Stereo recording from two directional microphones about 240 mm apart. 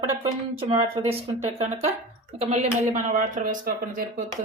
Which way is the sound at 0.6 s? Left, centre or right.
Right.